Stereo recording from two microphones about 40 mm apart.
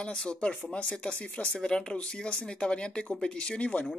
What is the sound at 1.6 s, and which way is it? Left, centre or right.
Speech, centre.